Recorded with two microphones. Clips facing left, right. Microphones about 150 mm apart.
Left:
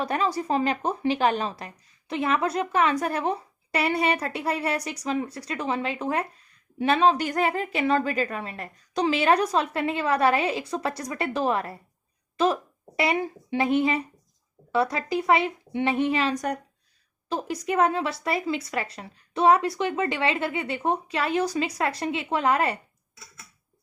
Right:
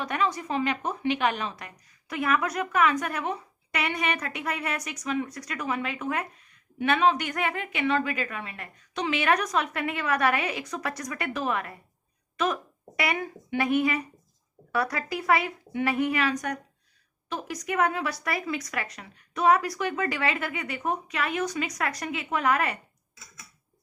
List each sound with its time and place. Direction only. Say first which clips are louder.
0.0 s a woman's voice: left 2 dB; 35° left (ahead or behind)